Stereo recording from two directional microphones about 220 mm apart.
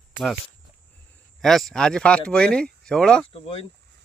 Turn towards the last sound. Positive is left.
turn(degrees=25)  # may be behind; listen again after turning